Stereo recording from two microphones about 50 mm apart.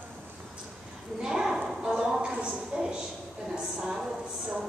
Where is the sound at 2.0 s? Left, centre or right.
Centre.